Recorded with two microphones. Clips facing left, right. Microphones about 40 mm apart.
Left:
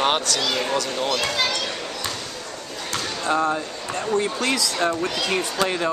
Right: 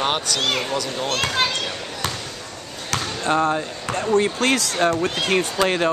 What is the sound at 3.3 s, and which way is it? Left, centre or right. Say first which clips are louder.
Speech: right 2 dB; right.